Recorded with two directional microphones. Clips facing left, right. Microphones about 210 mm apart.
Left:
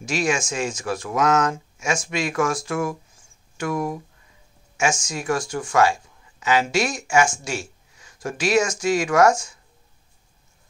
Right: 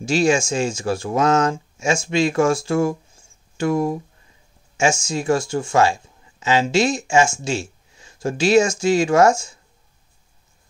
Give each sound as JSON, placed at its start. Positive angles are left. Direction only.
{"t": 0.0, "sound": "speech", "side_deg": -30}
{"t": 5.0, "sound": "speech", "side_deg": -25}